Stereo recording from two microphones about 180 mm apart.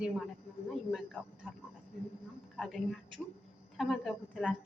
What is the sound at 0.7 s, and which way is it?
Speech, centre (ahead or behind).